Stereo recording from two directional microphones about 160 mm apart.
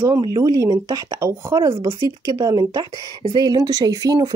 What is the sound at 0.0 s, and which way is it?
Speech, 20° right (ahead or behind).